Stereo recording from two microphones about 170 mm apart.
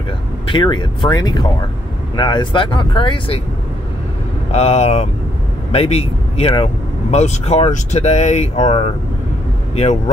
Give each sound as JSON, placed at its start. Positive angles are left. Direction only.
{"t": 0.5, "sound": "speech", "side_deg": 25}
{"t": 4.5, "sound": "speech", "side_deg": 40}